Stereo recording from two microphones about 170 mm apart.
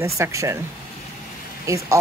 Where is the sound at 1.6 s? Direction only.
20° right (ahead or behind).